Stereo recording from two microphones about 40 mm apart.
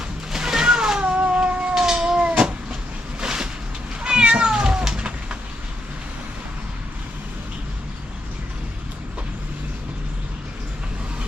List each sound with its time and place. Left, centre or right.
0.3 s cat: centre
1.7 s cat: centre
3.2 s a sound: centre
4.0 s cat: right